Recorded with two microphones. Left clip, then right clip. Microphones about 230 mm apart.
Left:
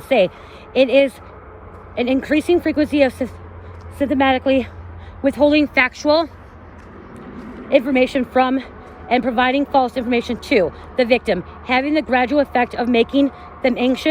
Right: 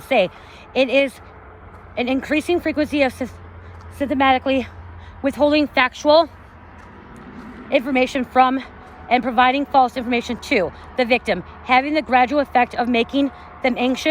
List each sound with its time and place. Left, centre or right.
0.1 s speech: centre
2.2 s a woman's voice: centre
5.5 s speech: centre
7.7 s a woman's voice: centre